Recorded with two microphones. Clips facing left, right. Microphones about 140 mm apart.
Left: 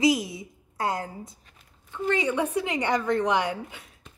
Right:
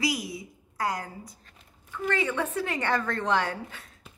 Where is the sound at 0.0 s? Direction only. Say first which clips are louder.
Left 7 dB; 25° left (ahead or behind).